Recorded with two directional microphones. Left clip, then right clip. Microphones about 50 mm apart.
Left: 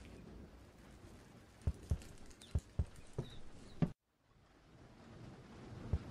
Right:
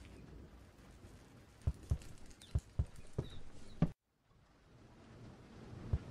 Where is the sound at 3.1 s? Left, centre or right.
Centre.